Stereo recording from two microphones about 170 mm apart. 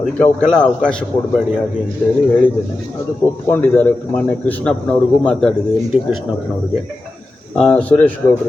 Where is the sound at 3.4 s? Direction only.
10° left (ahead or behind).